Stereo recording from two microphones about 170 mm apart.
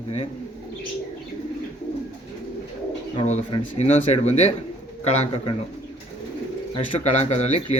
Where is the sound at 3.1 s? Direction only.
35° left (ahead or behind).